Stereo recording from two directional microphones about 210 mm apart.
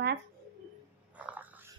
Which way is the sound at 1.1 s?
5° right (ahead or behind).